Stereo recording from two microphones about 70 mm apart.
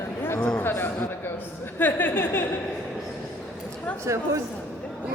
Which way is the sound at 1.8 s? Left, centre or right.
Left.